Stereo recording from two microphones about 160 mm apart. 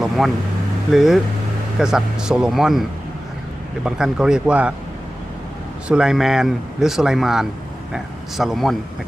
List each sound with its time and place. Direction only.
0.2 s speech: centre (ahead or behind)
3.8 s speech: 5° right (ahead or behind)
5.9 s speech: 5° right (ahead or behind)